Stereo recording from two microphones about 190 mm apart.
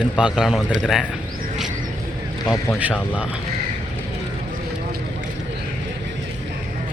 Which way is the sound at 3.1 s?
5° right (ahead or behind).